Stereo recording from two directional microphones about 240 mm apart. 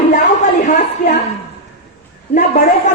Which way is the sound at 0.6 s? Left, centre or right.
Left.